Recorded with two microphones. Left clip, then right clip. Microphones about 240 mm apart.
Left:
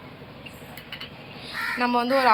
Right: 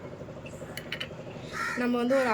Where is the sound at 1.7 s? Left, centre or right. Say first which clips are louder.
Left 5 dB; centre.